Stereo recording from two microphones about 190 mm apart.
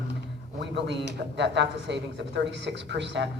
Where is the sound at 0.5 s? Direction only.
65° right (ahead or behind).